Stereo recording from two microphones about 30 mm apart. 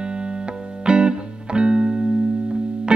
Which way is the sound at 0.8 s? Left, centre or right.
Right.